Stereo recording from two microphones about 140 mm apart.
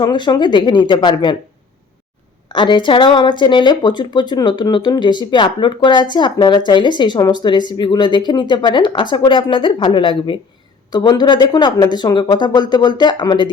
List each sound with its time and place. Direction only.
0.0 s speech: 35° left (ahead or behind)
2.5 s speech: 35° left (ahead or behind)